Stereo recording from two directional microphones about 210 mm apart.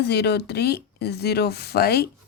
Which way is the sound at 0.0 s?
50° left (ahead or behind).